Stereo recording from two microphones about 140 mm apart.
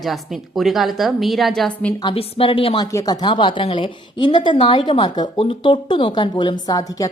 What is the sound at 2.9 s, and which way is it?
A woman's voice, 25° left (ahead or behind).